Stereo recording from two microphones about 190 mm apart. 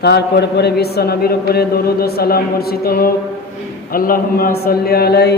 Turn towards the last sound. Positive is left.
turn(degrees=55)  # may be behind; listen again after turning